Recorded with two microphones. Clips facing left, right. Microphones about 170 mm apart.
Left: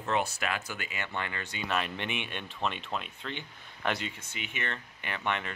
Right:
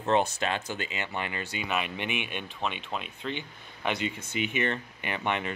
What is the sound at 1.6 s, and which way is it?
Speech, 5° right (ahead or behind).